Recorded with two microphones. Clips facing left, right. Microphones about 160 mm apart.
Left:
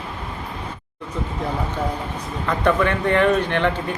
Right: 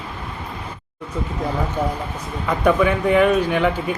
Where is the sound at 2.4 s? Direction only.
10° right (ahead or behind).